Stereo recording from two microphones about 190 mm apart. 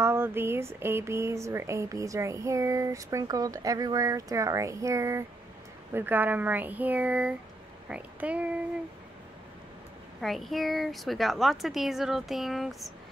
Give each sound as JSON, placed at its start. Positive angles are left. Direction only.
{"t": 0.0, "sound": "speech", "side_deg": -10}
{"t": 10.2, "sound": "a woman's voice", "side_deg": 0}